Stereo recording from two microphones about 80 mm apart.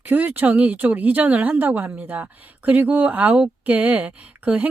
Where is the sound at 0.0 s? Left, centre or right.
Right.